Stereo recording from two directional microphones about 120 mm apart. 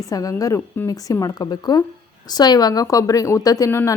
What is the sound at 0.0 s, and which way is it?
Speech, 30° left (ahead or behind).